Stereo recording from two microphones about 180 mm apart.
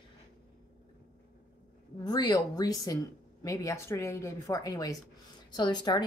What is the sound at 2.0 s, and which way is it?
A woman's voice, 20° left (ahead or behind).